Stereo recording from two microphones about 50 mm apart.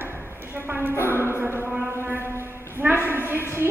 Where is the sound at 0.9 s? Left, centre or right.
Left.